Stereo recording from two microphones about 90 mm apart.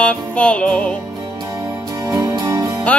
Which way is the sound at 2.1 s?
45° right (ahead or behind).